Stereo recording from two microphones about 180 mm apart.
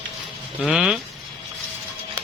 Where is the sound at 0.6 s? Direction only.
5° right (ahead or behind).